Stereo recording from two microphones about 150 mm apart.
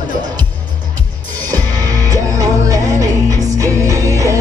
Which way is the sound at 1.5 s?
25° right (ahead or behind).